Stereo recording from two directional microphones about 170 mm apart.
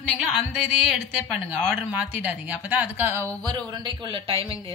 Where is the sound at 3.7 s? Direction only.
25° right (ahead or behind).